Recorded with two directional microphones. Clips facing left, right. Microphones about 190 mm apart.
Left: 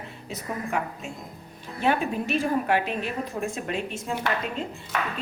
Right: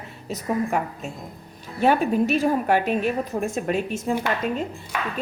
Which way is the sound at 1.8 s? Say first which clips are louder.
Right 6 dB; 40° right (ahead or behind).